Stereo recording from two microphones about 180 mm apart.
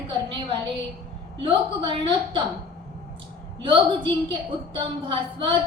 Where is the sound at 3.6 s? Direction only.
30° right (ahead or behind).